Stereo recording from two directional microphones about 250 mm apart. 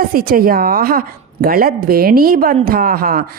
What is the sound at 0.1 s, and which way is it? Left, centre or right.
A woman's voice, right.